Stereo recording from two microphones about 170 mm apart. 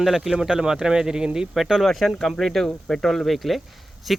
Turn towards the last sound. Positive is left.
turn(degrees=0)  # may be behind; listen again after turning